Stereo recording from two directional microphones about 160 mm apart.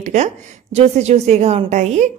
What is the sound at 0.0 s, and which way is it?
A woman's voice, 45° right (ahead or behind).